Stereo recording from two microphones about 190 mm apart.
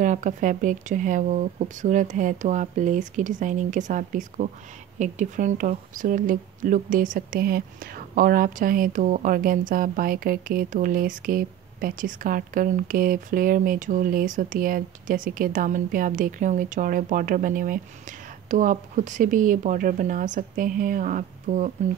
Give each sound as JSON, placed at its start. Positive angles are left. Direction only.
{"t": 0.0, "sound": "speech", "side_deg": -40}